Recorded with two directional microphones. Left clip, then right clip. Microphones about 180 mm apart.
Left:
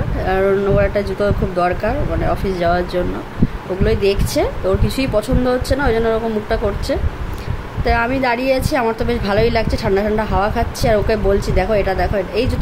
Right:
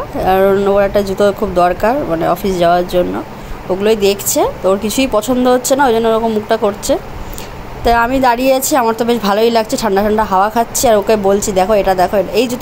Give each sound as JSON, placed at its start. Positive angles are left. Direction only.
{"t": 0.2, "sound": "a woman's voice", "side_deg": -15}